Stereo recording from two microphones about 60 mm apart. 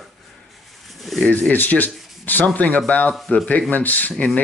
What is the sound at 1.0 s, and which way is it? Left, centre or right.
Speech, centre.